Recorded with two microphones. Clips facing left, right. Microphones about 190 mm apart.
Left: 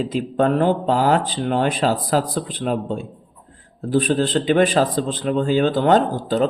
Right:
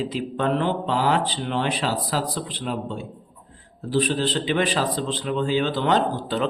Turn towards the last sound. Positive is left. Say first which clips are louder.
# left 5 dB
turn(degrees=45)  # may be behind; listen again after turning